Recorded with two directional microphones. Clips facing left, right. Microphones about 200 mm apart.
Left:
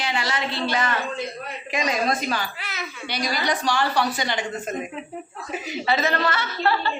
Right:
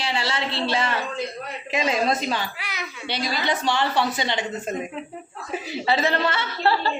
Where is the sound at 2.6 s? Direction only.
15° right (ahead or behind).